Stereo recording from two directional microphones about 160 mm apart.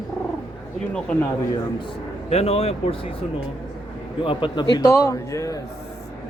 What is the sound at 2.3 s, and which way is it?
Speech, 40° left (ahead or behind).